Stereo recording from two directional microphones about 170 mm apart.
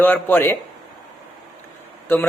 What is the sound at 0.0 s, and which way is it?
Speech, 10° left (ahead or behind).